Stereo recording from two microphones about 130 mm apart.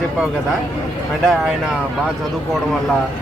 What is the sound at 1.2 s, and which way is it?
Speech, centre (ahead or behind).